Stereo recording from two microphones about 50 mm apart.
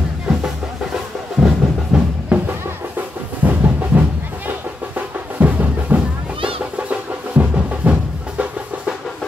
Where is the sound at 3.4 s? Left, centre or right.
Right.